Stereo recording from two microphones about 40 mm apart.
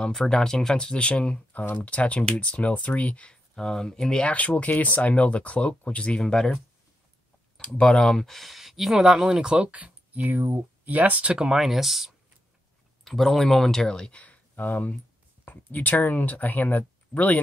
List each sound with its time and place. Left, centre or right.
0.1 s speech: centre
0.9 s speech: left
3.5 s speech: centre
4.2 s speech: left
6.2 s speech: centre
7.7 s speech: left
8.2 s speech: centre; by 9.8 s right
9.8 s speech: right
11.5 s speech: centre
13.0 s speech: centre
14.1 s a sound: left
14.5 s speech: left